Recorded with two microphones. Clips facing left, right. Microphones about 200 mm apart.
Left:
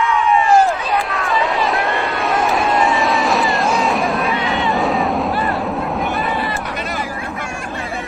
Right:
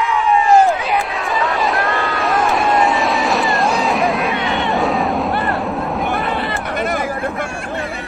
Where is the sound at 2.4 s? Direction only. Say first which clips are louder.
Right 1 dB; centre (ahead or behind).